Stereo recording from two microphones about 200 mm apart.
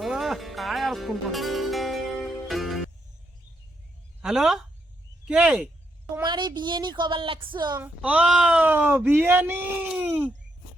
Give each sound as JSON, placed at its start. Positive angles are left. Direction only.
{"t": 0.0, "sound": "music", "side_deg": 0}
{"t": 4.2, "sound": "speech", "side_deg": 0}
{"t": 6.1, "sound": "speech", "side_deg": -20}
{"t": 7.8, "sound": "speech", "side_deg": -5}